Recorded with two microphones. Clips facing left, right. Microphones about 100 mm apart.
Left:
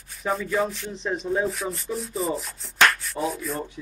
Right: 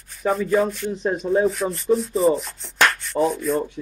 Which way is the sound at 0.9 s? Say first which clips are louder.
Right 5 dB; 50° right (ahead or behind).